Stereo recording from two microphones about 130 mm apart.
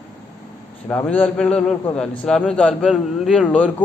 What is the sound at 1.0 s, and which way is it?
A man's voice, 10° left (ahead or behind).